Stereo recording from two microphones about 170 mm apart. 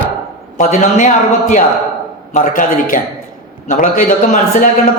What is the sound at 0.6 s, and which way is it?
Speech, 45° left (ahead or behind).